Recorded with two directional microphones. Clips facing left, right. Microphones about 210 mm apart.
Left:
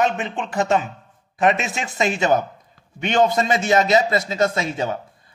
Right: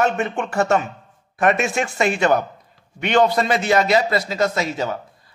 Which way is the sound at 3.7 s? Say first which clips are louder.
Left 1 dB; 25° left (ahead or behind).